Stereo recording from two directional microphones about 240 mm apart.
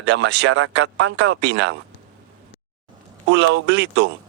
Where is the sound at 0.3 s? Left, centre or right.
Right.